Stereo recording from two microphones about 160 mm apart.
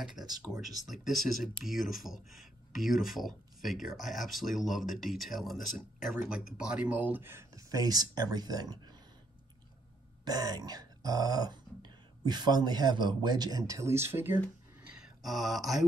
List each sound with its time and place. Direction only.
0.0 s speech: centre (ahead or behind); by 8.9 s 25° right (ahead or behind)
10.2 s speech: 25° right (ahead or behind)
14.9 s a sound: 5° right (ahead or behind)